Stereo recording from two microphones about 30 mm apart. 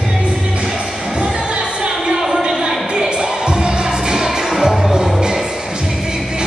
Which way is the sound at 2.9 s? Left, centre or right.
Right.